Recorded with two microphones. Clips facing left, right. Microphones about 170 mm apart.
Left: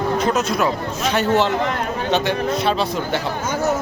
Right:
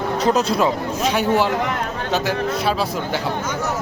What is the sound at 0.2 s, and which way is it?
Speech, 35° right (ahead or behind).